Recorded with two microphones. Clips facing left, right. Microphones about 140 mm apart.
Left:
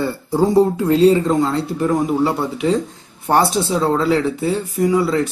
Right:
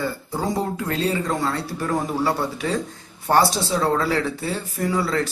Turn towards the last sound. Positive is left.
turn(degrees=15)  # may be behind; listen again after turning